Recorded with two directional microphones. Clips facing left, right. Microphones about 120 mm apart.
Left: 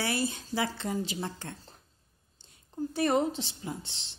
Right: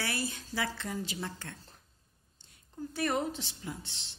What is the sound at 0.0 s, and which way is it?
A woman's voice, 25° left (ahead or behind).